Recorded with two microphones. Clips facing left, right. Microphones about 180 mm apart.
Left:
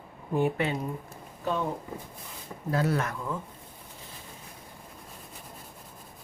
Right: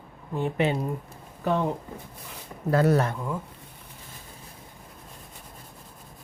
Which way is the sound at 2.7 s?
55° right (ahead or behind).